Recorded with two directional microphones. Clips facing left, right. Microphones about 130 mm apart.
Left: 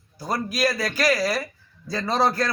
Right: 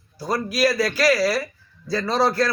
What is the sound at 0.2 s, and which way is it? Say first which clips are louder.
A man's voice: right 3 dB; 15° left (ahead or behind).